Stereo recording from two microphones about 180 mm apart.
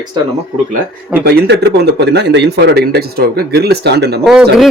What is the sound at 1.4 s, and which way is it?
Speech, 70° right (ahead or behind).